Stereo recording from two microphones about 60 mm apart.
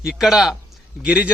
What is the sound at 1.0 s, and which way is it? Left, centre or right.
Speech, right.